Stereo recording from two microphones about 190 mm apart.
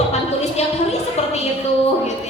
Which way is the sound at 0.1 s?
35° left (ahead or behind).